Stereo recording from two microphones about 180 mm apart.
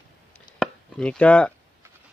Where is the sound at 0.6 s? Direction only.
5° left (ahead or behind).